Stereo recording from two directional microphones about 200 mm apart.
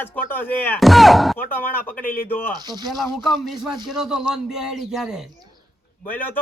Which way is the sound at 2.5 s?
20° right (ahead or behind).